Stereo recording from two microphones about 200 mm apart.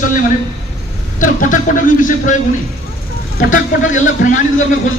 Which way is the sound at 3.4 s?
40° left (ahead or behind).